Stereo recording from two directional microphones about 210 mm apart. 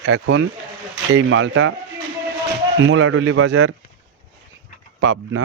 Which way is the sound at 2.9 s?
80° right.